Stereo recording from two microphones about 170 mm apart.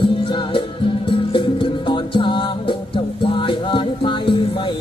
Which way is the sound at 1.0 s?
30° left (ahead or behind).